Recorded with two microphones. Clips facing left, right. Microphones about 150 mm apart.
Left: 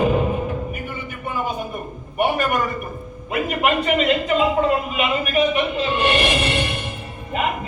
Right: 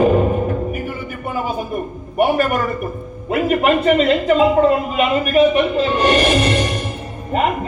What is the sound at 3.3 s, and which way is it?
A man's voice, 40° right (ahead or behind).